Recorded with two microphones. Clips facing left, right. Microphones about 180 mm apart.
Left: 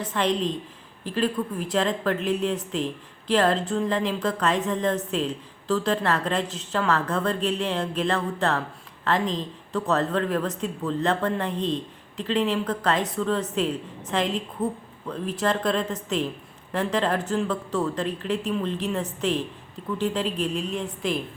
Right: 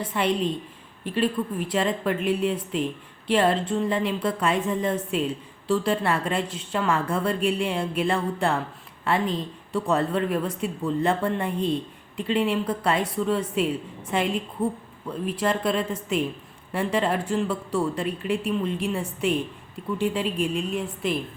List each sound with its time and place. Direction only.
0.0 s a woman's voice: 5° right (ahead or behind)